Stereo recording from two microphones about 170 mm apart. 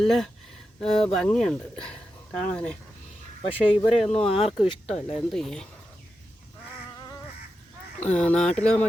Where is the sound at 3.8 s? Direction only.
Centre (ahead or behind).